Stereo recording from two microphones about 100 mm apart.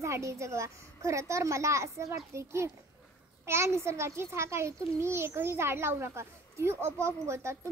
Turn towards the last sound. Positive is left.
turn(degrees=-25)  # may be behind; listen again after turning